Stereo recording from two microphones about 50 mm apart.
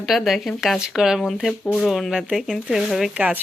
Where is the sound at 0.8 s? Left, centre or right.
Centre.